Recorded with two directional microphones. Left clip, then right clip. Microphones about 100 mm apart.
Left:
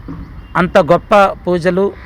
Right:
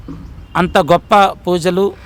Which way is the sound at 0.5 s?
35° right (ahead or behind).